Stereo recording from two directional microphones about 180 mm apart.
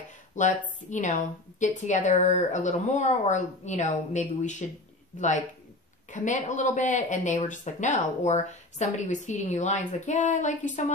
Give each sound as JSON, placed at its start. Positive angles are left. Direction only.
{"t": 0.4, "sound": "speech", "side_deg": 45}
{"t": 6.1, "sound": "speech", "side_deg": 45}